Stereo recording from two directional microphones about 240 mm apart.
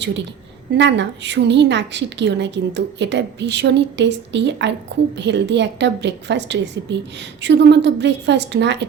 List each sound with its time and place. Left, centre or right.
0.8 s a woman's voice: right